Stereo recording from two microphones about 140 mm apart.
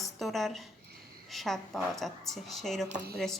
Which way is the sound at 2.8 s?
75° right (ahead or behind).